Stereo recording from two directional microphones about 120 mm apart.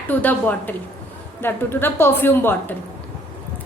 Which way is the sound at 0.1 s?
15° left (ahead or behind).